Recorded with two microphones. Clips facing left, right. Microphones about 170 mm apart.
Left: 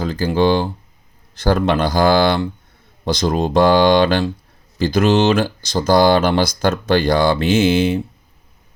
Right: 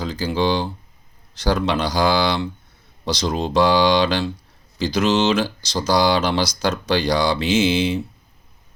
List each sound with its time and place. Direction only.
0.0 s speech: 55° left (ahead or behind)